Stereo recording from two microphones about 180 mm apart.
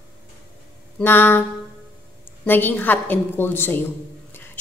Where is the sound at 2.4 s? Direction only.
10° left (ahead or behind).